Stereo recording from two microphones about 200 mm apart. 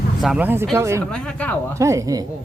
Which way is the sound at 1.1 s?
5° left (ahead or behind).